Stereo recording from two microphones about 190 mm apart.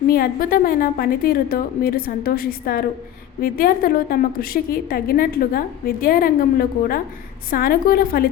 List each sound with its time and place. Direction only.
0.1 s a woman's voice: 50° left (ahead or behind)